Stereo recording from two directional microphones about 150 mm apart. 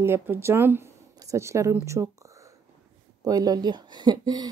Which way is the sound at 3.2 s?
25° right (ahead or behind).